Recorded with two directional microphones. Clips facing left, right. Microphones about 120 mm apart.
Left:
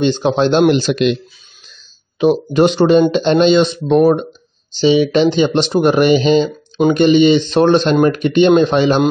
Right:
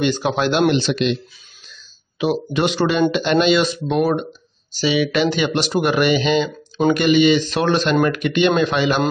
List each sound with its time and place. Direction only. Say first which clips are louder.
0.0 s speech: left 5 dB; 25° left (ahead or behind); by 1.1 s 45° left (ahead or behind)
2.5 s speech: left 10 dB; 35° left (ahead or behind)
4.1 s speech: left 6 dB; 25° left (ahead or behind)